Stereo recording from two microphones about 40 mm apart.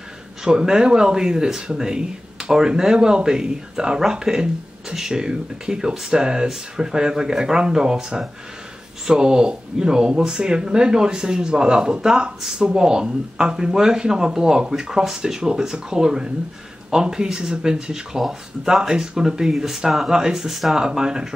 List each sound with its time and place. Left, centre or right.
0.4 s speech: centre
20.2 s speech: centre
20.4 s speech: centre
20.7 s speech: centre